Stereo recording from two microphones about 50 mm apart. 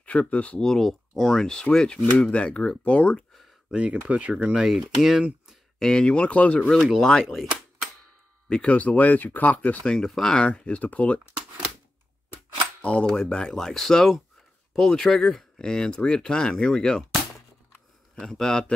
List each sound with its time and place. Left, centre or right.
0.0 s speech: left
0.6 s speech: centre; by 3.3 s left
3.7 s speech: right
4.6 s speech: centre
5.8 s speech: centre
6.0 s speech: left
7.0 s speech: centre
7.2 s a sound: centre
8.5 s speech: left
9.8 s speech: centre; by 11.1 s left
12.8 s speech: left
18.2 s speech: centre